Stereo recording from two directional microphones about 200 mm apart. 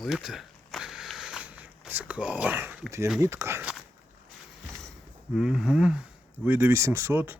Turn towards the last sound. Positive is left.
turn(degrees=-10)  # may be behind; listen again after turning